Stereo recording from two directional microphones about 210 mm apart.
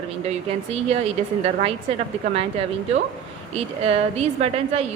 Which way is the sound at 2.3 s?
30° right (ahead or behind).